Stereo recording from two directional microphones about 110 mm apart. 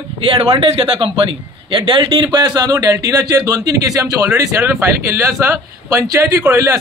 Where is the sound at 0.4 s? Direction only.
55° right (ahead or behind).